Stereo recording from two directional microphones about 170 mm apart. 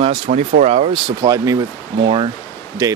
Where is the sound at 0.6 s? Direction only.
35° right (ahead or behind).